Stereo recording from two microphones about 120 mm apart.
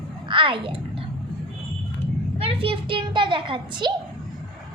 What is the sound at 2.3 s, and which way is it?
A woman's voice, 50° right (ahead or behind).